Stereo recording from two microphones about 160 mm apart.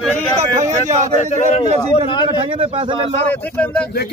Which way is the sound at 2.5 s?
35° right (ahead or behind).